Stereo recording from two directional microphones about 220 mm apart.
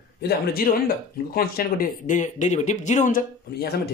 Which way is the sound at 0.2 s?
45° left (ahead or behind).